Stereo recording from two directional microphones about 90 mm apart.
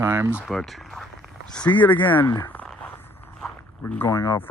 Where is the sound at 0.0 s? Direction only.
30° right (ahead or behind).